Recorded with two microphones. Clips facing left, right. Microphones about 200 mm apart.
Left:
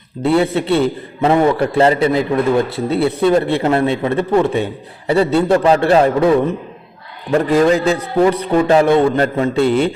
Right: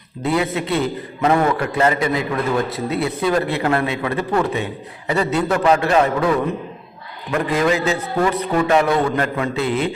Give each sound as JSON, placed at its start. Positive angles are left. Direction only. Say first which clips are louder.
{"t": 0.3, "sound": "a man's voice", "louder": "left 5 dB", "side_deg": 30}
{"t": 9.6, "sound": "a man's voice", "louder": "left 6 dB", "side_deg": 0}